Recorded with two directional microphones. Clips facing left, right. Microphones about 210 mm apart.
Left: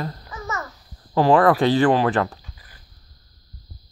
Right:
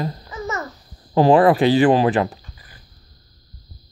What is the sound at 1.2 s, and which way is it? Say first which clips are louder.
Speech: right 3 dB; 20° right (ahead or behind).